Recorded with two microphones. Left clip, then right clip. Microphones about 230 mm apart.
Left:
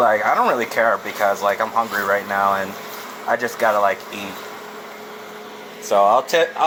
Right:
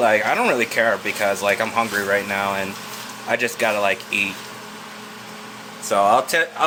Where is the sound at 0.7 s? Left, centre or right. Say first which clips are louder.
Left 1 dB; right.